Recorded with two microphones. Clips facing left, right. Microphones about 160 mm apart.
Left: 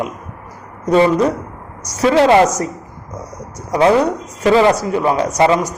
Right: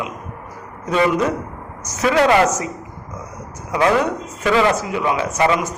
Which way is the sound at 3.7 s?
35° left (ahead or behind).